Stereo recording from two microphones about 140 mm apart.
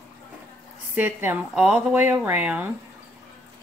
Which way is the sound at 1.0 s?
15° right (ahead or behind).